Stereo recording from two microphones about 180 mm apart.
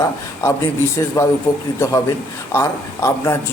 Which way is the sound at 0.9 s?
15° left (ahead or behind).